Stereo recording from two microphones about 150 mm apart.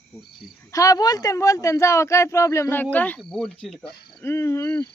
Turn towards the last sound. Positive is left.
turn(degrees=15)  # may be behind; listen again after turning